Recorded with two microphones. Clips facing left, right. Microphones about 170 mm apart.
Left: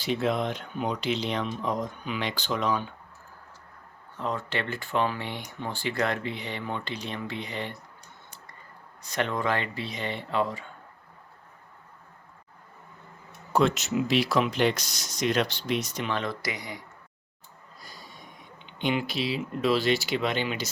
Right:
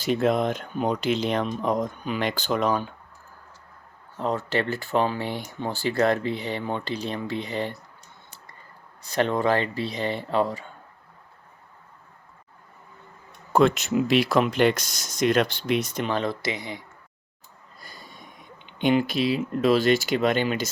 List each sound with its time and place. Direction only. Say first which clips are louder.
0.0 s speech: right 5 dB; 45° right (ahead or behind)
4.2 s speech: right 5 dB; 40° right (ahead or behind)
9.0 s speech: right 5 dB; 35° right (ahead or behind)
13.5 s speech: right 4 dB; 55° right (ahead or behind)
16.0 s speech: right 4 dB; 35° right (ahead or behind)
18.6 s speech: right 6 dB; 50° right (ahead or behind)